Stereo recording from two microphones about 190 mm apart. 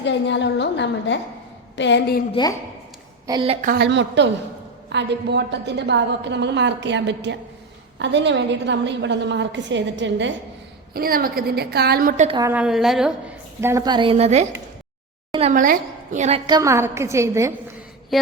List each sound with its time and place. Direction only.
0.0 s a woman's voice: 70° left (ahead or behind)
2.3 s a woman's voice: 20° left (ahead or behind)
3.2 s a woman's voice: 25° right (ahead or behind)
3.7 s a woman's voice: 60° right (ahead or behind)
10.9 s a woman's voice: 50° right (ahead or behind)
12.4 s a woman's voice: 10° right (ahead or behind)
13.6 s a woman's voice: 15° right (ahead or behind); by 14.4 s 35° right (ahead or behind)
15.3 s a sound: 30° right (ahead or behind)
15.5 s a woman's voice: 45° right (ahead or behind)
16.5 s a woman's voice: 15° right (ahead or behind)
18.1 s a sound: centre (ahead or behind)